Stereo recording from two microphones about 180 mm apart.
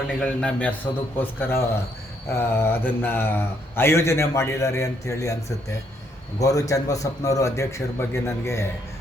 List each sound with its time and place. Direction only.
0.2 s a man's voice: 5° left (ahead or behind)